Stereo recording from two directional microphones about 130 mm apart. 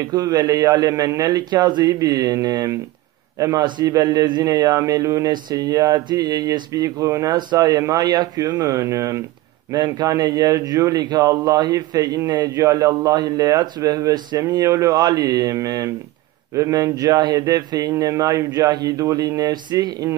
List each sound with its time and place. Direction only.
0.0 s a man's voice: 30° right (ahead or behind)